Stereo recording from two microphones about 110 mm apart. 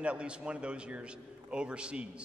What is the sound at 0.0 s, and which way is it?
A man's voice, 10° right (ahead or behind).